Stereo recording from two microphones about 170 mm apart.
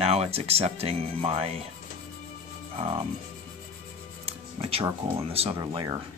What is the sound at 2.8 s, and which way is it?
Speech, 35° right (ahead or behind).